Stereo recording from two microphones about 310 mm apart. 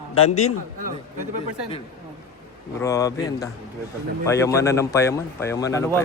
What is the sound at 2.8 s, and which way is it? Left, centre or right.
Speech, centre.